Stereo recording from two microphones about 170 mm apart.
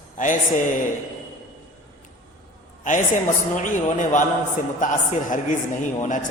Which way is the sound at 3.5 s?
50° left (ahead or behind).